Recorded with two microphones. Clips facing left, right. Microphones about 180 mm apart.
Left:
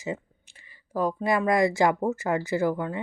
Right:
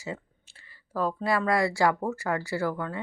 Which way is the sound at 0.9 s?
15° left (ahead or behind).